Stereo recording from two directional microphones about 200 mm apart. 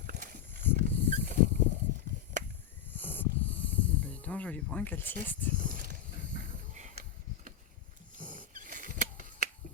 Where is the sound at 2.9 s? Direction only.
10° left (ahead or behind).